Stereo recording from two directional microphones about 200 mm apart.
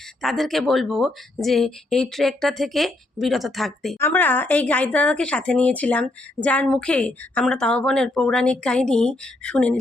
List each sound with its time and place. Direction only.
0.2 s speech: centre (ahead or behind)
3.9 s speech: 10° left (ahead or behind)